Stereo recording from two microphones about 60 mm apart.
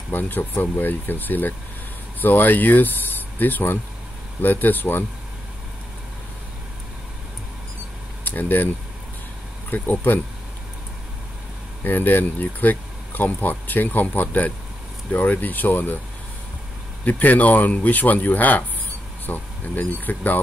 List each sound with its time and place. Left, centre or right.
0.1 s speech: left
8.2 s vehicle: left
9.7 s speech: left
11.8 s speech: left
17.0 s speech: left